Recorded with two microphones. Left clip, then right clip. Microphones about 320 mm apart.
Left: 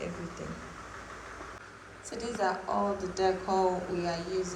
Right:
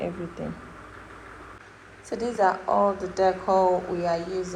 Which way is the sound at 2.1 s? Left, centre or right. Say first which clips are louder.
Right 8 dB; centre.